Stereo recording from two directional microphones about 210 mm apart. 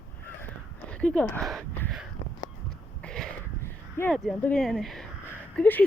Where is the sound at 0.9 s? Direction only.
5° left (ahead or behind).